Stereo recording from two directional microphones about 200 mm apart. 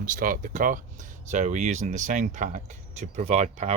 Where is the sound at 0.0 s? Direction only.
45° right (ahead or behind).